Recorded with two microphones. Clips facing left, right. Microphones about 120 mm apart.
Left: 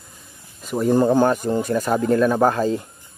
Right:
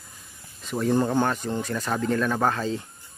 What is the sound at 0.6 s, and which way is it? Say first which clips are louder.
Speech: left 5 dB; 10° left (ahead or behind).